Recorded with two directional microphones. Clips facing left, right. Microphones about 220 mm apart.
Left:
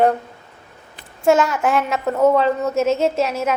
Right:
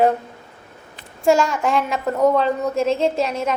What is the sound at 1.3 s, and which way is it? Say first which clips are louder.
A woman's voice: left 1 dB; 5° left (ahead or behind).